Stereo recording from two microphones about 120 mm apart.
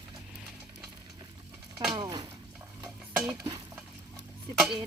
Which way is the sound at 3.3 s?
30° right (ahead or behind).